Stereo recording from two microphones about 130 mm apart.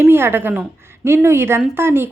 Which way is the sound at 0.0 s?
15° right (ahead or behind).